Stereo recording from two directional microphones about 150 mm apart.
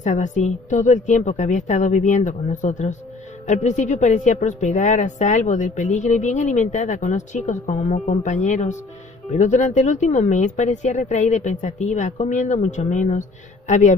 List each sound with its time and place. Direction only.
0.0 s a woman's voice: 55° left (ahead or behind)